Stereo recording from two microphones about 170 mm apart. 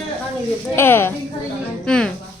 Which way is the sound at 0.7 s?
15° left (ahead or behind).